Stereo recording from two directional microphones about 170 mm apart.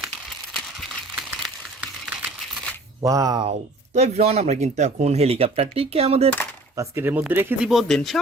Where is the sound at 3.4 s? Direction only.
40° right (ahead or behind).